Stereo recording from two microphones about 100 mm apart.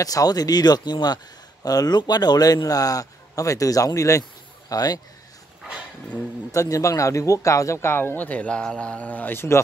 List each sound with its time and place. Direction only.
0.0 s speech: 35° left (ahead or behind)
6.5 s speech: 35° left (ahead or behind)